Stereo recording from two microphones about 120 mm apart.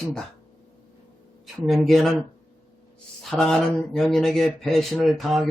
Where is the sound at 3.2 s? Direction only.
5° left (ahead or behind).